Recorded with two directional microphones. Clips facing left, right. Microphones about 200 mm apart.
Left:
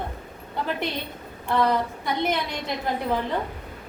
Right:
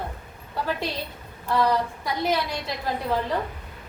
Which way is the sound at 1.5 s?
20° left (ahead or behind).